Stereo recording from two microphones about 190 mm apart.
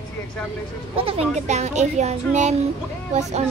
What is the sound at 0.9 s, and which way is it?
Speech, 30° right (ahead or behind).